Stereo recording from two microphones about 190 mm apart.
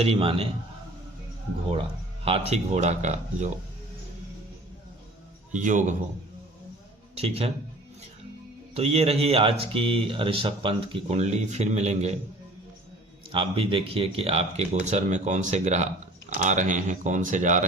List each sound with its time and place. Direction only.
0.0 s a man's voice: 30° right (ahead or behind)
2.2 s speech: 30° right (ahead or behind)
5.5 s a man's voice: 40° right (ahead or behind)
7.2 s speech: 30° right (ahead or behind)
8.7 s speech: 30° right (ahead or behind)
13.3 s speech: 30° right (ahead or behind)